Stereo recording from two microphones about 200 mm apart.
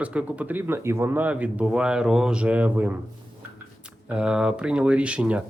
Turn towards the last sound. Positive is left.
turn(degrees=-5)  # may be behind; listen again after turning